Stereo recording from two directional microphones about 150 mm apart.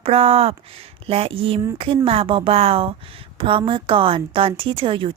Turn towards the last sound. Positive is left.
turn(degrees=-35)  # may be behind; listen again after turning